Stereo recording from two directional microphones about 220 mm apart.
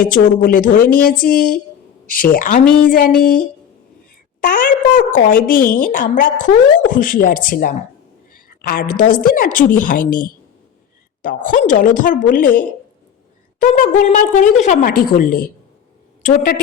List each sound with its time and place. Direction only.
0.1 s a woman's voice: 40° left (ahead or behind)